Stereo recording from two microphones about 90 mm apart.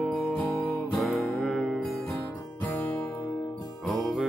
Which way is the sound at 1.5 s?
Centre (ahead or behind).